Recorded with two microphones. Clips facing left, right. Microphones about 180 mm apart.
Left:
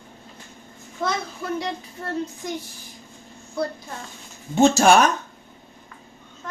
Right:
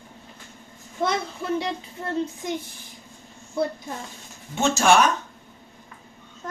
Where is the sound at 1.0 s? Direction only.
25° right (ahead or behind).